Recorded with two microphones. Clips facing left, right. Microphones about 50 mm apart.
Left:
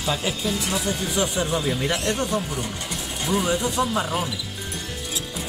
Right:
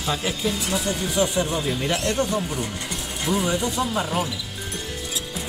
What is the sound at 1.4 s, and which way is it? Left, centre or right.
Speech, centre.